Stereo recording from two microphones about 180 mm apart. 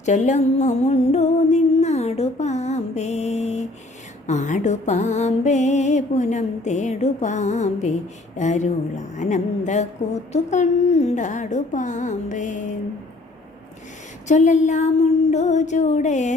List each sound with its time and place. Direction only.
0.0 s music: 40° left (ahead or behind)
9.1 s speech: 40° left (ahead or behind)
10.3 s music: 40° left (ahead or behind)
14.3 s music: 45° left (ahead or behind)